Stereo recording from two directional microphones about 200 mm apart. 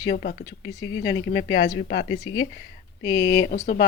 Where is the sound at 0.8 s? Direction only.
65° left (ahead or behind).